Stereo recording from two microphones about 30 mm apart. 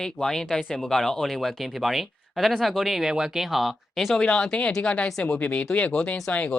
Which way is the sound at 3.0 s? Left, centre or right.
Centre.